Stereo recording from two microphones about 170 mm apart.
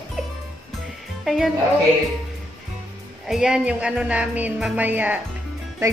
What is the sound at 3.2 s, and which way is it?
Speech, 5° right (ahead or behind).